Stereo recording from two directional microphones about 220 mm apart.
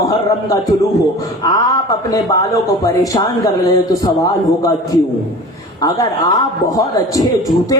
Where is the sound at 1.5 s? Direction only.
15° left (ahead or behind).